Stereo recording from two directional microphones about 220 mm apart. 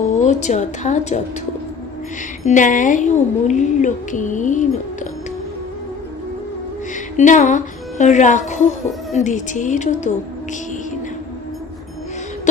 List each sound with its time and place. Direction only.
0.3 s speech: 30° left (ahead or behind)
2.5 s speech: 35° left (ahead or behind)
7.2 s speech: 35° left (ahead or behind)